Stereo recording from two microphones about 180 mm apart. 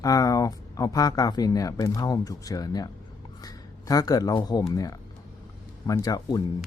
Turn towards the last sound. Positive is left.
turn(degrees=20)  # may be behind; listen again after turning